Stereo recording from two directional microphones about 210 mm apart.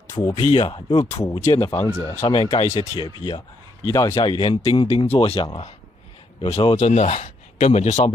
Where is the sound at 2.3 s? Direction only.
25° left (ahead or behind).